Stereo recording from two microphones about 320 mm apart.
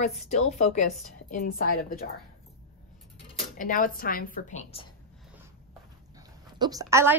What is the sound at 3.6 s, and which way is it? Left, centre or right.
A woman's voice, left.